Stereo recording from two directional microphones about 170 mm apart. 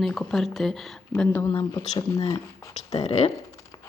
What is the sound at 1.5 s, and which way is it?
Speech, 25° left (ahead or behind).